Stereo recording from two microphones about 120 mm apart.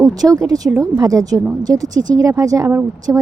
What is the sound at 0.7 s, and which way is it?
A woman's voice, 30° right (ahead or behind).